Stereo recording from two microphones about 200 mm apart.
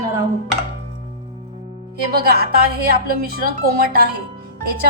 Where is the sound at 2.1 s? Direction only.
50° right (ahead or behind).